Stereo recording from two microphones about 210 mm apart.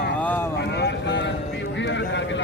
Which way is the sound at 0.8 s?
55° left (ahead or behind).